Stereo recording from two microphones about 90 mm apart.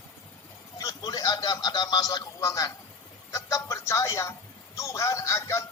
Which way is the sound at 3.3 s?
40° left (ahead or behind).